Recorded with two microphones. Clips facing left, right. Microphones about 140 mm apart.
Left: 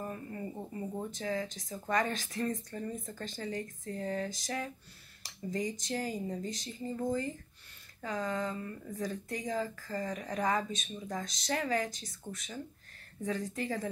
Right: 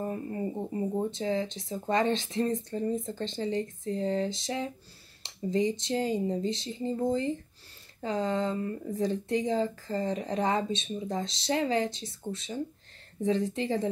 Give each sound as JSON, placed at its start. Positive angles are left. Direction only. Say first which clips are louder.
{"t": 0.0, "sound": "speech", "louder": "right 7 dB", "side_deg": -25}